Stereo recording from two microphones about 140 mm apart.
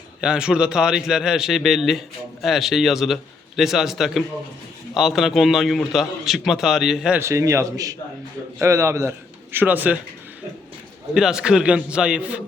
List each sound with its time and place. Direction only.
0.2 s a man's voice: 5° right (ahead or behind)
7.2 s a man's voice: 20° right (ahead or behind)
11.1 s a man's voice: 5° right (ahead or behind)